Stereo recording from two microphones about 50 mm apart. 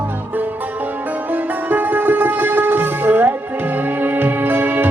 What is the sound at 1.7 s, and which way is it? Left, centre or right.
Music, right.